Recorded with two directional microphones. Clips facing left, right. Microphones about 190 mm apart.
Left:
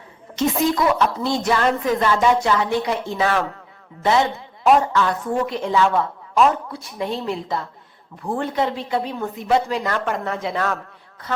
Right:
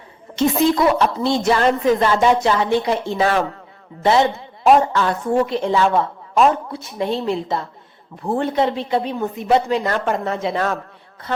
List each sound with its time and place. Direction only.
0.3 s a woman's voice: 30° right (ahead or behind)
4.6 s a woman's voice: 30° right (ahead or behind)